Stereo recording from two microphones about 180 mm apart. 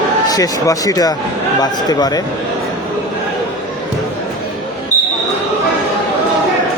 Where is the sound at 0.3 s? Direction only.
20° left (ahead or behind).